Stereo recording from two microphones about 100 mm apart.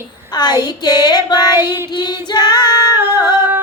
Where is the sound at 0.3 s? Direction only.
45° left (ahead or behind).